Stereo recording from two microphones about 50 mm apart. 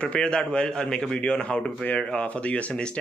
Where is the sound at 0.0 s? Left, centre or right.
Left.